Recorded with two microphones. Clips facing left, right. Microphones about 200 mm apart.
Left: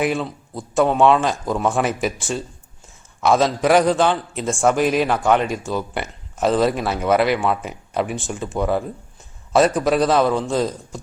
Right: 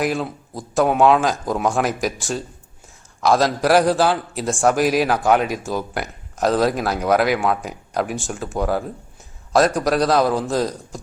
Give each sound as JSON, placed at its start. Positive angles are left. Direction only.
{"t": 0.0, "sound": "a man's voice", "side_deg": 0}